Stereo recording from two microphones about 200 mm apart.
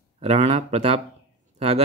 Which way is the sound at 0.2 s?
30° right (ahead or behind).